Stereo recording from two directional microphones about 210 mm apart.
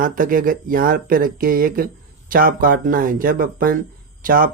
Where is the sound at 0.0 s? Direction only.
40° right (ahead or behind).